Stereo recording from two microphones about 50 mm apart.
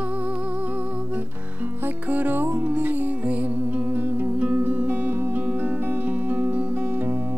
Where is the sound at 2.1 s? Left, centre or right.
Right.